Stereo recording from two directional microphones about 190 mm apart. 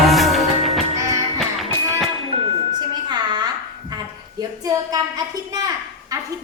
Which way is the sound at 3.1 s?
20° right (ahead or behind).